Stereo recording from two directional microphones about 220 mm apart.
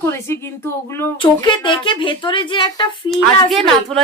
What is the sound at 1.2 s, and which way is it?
Speech, 20° left (ahead or behind).